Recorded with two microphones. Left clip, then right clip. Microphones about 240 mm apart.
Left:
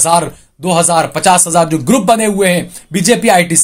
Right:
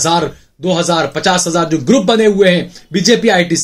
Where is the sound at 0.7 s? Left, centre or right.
Left.